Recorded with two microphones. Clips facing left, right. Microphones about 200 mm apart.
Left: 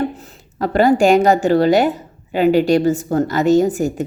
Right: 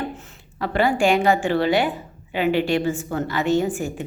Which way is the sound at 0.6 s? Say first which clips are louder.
Left 6 dB; 40° left (ahead or behind).